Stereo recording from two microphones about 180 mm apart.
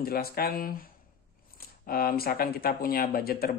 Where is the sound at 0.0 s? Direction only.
55° left (ahead or behind).